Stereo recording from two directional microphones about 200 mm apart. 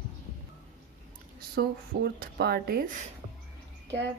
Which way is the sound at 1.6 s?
50° right (ahead or behind).